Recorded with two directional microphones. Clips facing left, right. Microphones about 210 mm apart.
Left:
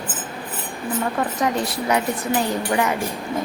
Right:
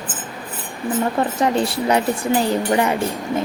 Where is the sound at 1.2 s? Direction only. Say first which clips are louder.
Right 4 dB; 30° right (ahead or behind).